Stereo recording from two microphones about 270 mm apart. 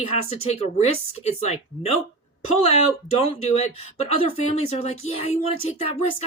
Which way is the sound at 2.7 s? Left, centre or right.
Left.